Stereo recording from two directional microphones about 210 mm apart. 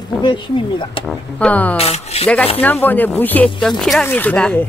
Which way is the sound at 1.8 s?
30° left (ahead or behind).